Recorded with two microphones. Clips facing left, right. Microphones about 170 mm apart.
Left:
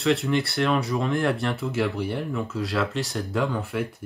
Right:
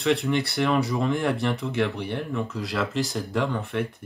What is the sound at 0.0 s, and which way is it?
Speech, centre (ahead or behind).